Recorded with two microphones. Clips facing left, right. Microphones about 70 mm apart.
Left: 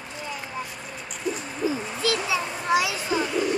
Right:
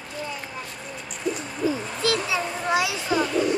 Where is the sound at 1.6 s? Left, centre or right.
Right.